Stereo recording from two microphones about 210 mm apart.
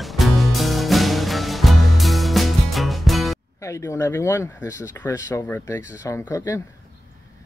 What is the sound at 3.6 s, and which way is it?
Speech, 15° left (ahead or behind).